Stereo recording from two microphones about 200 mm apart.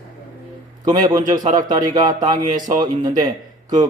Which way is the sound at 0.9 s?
20° right (ahead or behind).